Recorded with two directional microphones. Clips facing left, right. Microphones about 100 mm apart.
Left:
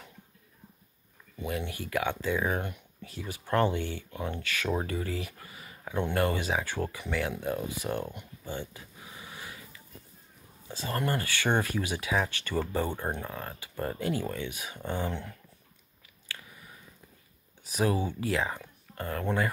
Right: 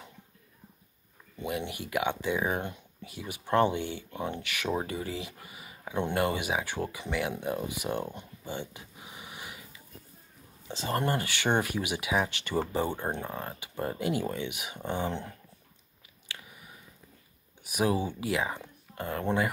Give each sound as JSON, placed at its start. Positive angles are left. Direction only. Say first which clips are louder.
{"t": 1.4, "sound": "speech", "louder": "right 1 dB", "side_deg": -20}
{"t": 16.3, "sound": "a sound", "louder": "left 1 dB", "side_deg": -20}
{"t": 17.6, "sound": "speech", "louder": "even", "side_deg": -15}